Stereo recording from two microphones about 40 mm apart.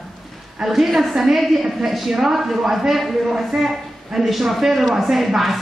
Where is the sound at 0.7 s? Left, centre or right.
Centre.